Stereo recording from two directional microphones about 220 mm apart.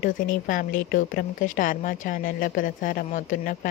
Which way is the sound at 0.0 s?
40° left (ahead or behind).